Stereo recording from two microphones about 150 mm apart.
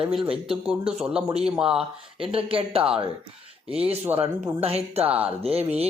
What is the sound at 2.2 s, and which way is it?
Speech, 40° right (ahead or behind).